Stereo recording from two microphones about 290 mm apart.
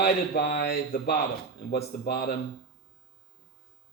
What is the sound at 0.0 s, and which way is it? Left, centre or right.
A man's voice, left.